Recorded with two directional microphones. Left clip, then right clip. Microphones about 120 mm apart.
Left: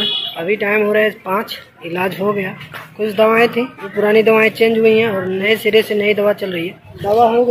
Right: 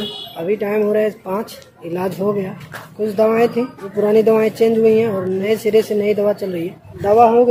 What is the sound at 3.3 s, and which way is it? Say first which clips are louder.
Speech: left 3 dB; 15° right (ahead or behind).